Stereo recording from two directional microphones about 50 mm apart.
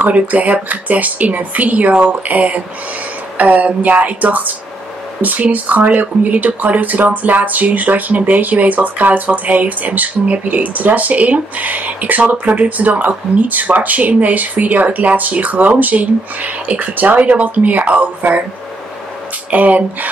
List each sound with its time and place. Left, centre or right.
0.0 s speech: right
19.5 s speech: right